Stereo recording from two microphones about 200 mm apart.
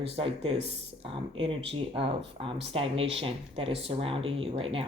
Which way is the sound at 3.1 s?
25° right (ahead or behind).